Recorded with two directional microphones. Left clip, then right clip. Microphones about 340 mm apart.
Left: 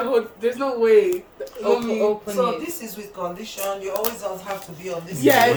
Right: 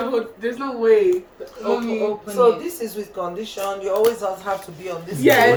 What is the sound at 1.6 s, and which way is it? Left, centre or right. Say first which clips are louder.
Speech: left 2 dB; left.